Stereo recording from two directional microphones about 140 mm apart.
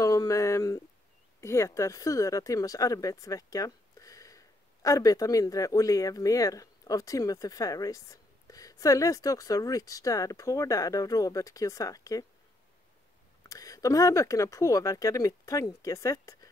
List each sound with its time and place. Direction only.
0.0 s a sound: 25° left (ahead or behind)
1.4 s speech: 20° left (ahead or behind)
13.5 s speech: 25° left (ahead or behind)